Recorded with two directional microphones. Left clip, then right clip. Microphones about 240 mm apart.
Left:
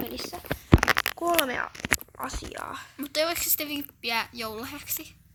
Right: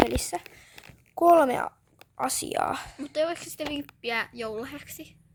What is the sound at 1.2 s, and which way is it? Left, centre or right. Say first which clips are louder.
Speech: right 7 dB; right.